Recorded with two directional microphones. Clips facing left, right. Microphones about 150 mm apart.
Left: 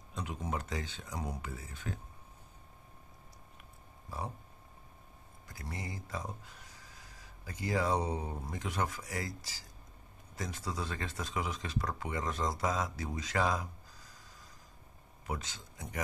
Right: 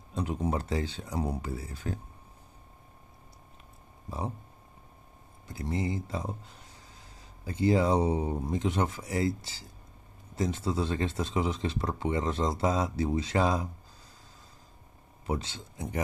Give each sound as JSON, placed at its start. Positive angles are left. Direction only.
{"t": 0.1, "sound": "speech", "side_deg": -35}
{"t": 5.5, "sound": "speech", "side_deg": -25}
{"t": 15.2, "sound": "speech", "side_deg": -30}